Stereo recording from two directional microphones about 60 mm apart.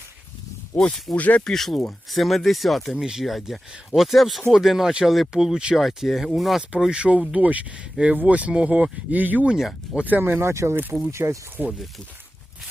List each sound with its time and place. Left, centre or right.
1.1 s speech: left
1.4 s speech: centre
5.3 s speech: centre
5.7 s speech: centre
6.9 s speech: centre; by 11.3 s right
11.6 s speech: right